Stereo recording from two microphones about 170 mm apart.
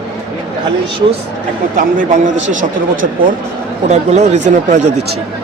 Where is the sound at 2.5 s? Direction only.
50° right (ahead or behind).